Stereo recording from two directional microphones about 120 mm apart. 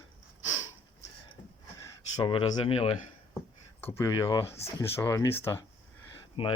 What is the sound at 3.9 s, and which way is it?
Speech, 25° left (ahead or behind).